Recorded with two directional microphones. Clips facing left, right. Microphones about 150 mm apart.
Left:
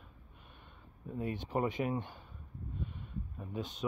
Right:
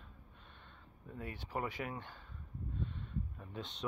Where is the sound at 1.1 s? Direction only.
20° left (ahead or behind).